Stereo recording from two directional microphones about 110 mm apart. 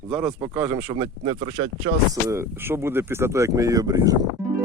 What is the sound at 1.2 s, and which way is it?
Speech, 50° right (ahead or behind).